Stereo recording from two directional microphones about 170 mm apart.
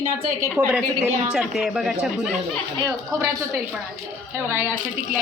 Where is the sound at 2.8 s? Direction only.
20° right (ahead or behind).